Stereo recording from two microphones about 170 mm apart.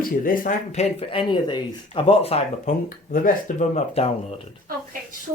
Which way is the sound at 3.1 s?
55° left (ahead or behind).